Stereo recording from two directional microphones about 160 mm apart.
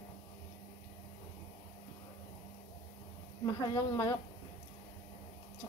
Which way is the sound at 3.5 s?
25° left (ahead or behind).